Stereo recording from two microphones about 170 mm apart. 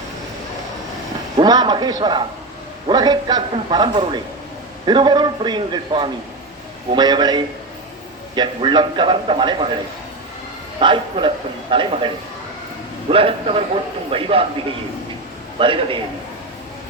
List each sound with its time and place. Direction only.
1.4 s a man's voice: 25° right (ahead or behind)
10.8 s a man's voice: 30° right (ahead or behind)
15.5 s a man's voice: 30° right (ahead or behind)